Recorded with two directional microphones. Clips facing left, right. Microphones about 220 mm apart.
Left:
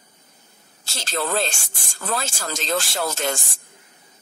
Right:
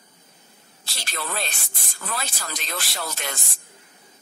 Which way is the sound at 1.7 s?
45° left (ahead or behind).